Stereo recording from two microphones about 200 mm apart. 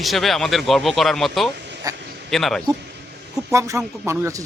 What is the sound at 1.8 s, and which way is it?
Speech, 15° right (ahead or behind).